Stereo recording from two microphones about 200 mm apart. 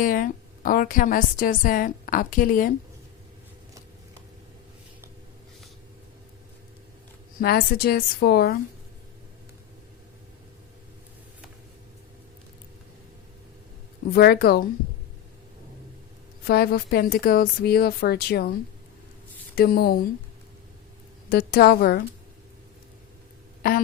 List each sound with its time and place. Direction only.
0.0 s a woman's voice: 45° left (ahead or behind)
7.3 s a woman's voice: 50° left (ahead or behind)
14.1 s a woman's voice: 50° left (ahead or behind)
16.4 s a woman's voice: 50° left (ahead or behind)
19.5 s a woman's voice: 50° left (ahead or behind)
21.2 s a woman's voice: 50° left (ahead or behind)